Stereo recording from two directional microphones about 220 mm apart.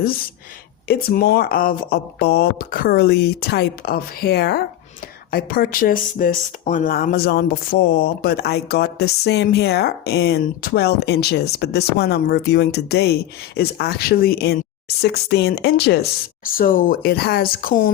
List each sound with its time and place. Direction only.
0.9 s speech: 45° left (ahead or behind)